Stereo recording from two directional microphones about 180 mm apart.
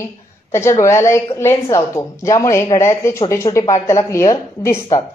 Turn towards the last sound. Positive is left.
turn(degrees=15)  # may be behind; listen again after turning